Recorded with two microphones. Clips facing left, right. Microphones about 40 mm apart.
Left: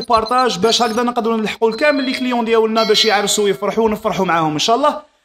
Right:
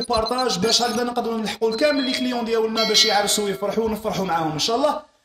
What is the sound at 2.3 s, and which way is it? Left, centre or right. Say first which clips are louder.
Speech: left 11 dB; left.